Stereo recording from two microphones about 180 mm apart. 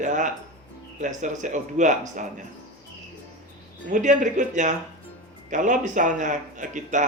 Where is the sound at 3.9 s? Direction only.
45° right (ahead or behind).